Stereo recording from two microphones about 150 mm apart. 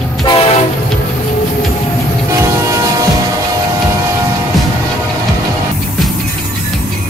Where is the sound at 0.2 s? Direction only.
35° left (ahead or behind).